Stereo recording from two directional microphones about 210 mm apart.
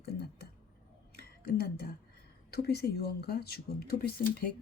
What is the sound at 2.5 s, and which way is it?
Speech, 50° left (ahead or behind).